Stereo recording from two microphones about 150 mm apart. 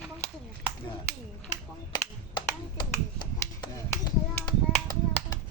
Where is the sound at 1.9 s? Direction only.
30° left (ahead or behind).